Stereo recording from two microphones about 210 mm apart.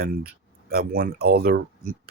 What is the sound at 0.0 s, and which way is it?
Speech, 45° right (ahead or behind).